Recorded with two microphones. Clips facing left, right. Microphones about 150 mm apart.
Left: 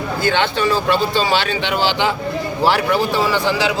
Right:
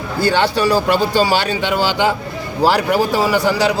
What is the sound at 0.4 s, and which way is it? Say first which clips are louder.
A man's voice: right 3 dB; 40° right (ahead or behind).